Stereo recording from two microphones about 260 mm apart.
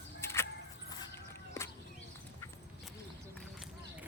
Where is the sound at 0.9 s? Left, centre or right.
Centre.